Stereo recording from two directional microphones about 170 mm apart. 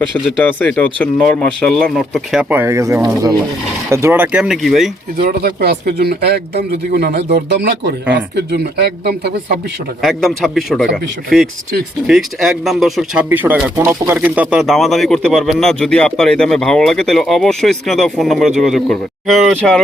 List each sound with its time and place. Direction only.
0.3 s speech: 10° left (ahead or behind)
2.4 s speech: 10° right (ahead or behind)
5.2 s speech: 60° right (ahead or behind)
10.0 s speech: centre (ahead or behind)